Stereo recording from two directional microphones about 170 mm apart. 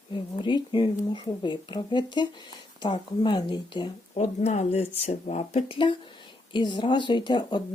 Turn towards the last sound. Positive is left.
turn(degrees=25)  # may be behind; listen again after turning